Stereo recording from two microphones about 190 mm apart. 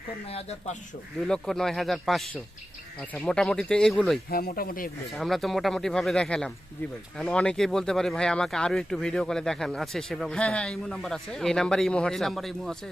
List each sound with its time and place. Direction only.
0.3 s speech: 35° left (ahead or behind)
1.3 s speech: centre (ahead or behind)
4.3 s speech: 50° left (ahead or behind)
5.1 s speech: centre (ahead or behind)